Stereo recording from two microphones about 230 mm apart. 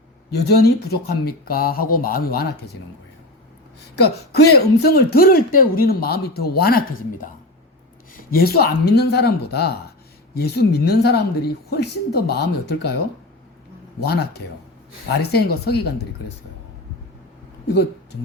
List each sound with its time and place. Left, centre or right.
0.3 s speech: left
4.5 s a woman's voice: left
14.0 s a woman's voice: left